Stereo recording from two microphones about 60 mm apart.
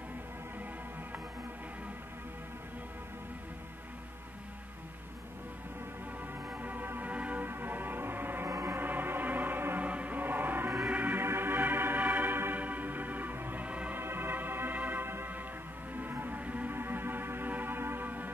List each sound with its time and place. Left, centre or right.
6.5 s music: right
8.5 s music: right
8.7 s music: right
13.9 s music: right